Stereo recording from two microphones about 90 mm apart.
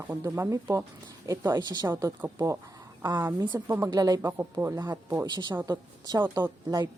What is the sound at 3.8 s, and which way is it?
Speech, 45° right (ahead or behind).